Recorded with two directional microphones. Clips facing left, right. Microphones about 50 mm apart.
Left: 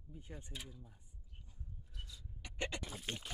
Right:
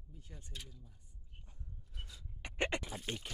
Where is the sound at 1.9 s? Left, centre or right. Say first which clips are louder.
Right 2 dB; right.